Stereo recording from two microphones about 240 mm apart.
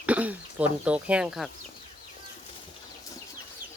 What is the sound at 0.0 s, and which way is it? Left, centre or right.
Speech, centre.